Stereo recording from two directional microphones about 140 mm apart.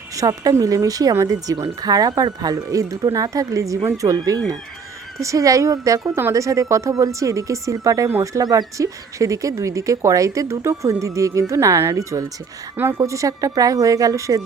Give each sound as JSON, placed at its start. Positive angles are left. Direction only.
{"t": 0.2, "sound": "speech", "side_deg": -25}